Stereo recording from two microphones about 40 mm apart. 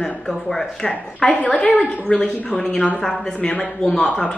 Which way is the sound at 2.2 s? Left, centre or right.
Centre.